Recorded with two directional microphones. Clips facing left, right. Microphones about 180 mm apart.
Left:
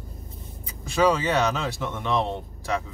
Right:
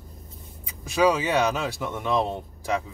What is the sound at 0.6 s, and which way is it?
Speech, 10° right (ahead or behind).